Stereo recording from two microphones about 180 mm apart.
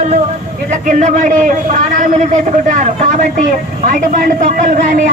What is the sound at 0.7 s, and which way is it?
A man's voice, 40° right (ahead or behind).